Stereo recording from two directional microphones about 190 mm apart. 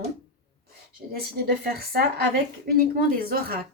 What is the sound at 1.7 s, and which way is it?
A woman's voice, 55° right (ahead or behind).